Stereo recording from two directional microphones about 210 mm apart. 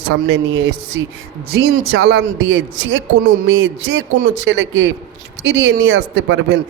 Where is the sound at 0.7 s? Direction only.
85° right.